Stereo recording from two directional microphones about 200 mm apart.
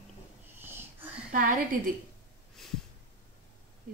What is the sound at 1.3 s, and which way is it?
Speech, 40° right (ahead or behind).